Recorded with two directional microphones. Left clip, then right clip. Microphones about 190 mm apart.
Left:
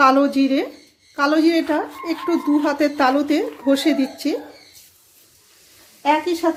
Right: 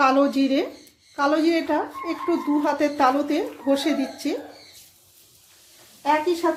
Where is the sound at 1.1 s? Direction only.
25° left (ahead or behind).